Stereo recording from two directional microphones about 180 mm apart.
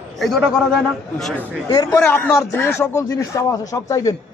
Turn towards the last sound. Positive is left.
turn(degrees=20)  # may be behind; listen again after turning